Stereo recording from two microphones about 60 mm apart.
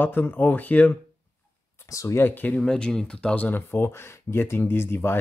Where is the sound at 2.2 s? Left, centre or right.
Left.